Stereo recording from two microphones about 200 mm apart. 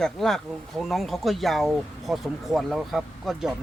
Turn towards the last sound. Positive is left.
turn(degrees=0)  # may be behind; listen again after turning